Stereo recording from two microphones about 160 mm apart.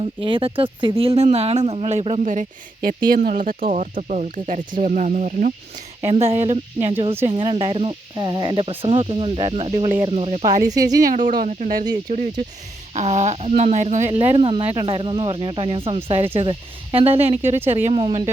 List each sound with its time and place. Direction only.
0.0 s speech: 30° right (ahead or behind); by 5.5 s 50° right (ahead or behind)
6.0 s speech: 40° right (ahead or behind)
10.4 s speech: 50° right (ahead or behind)
12.9 s speech: 45° right (ahead or behind)